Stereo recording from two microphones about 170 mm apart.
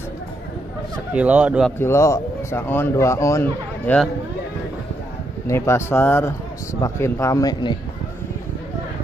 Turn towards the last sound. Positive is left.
turn(degrees=25)  # may be behind; listen again after turning